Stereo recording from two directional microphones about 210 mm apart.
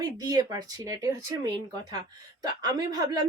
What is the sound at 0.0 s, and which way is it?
A woman's voice, 20° right (ahead or behind).